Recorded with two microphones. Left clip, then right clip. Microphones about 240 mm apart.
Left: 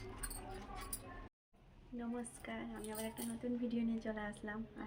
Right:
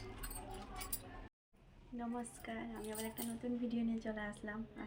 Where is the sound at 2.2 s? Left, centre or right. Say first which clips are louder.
Right 1 dB; centre.